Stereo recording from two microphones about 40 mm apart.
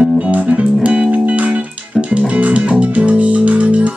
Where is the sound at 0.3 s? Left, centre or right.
Right.